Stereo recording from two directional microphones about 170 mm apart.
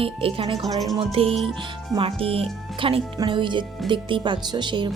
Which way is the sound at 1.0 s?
35° right (ahead or behind).